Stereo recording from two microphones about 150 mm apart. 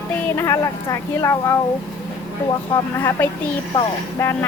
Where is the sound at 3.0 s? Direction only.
15° left (ahead or behind).